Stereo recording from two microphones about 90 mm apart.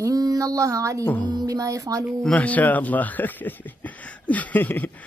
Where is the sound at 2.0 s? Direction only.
15° left (ahead or behind).